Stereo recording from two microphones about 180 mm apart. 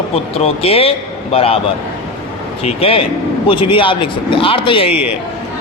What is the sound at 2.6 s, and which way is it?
A man's voice, 30° left (ahead or behind).